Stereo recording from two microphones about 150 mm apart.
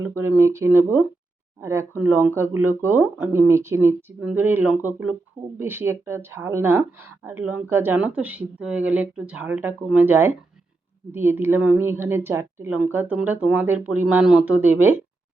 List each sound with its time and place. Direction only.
0.0 s a woman's voice: 15° right (ahead or behind)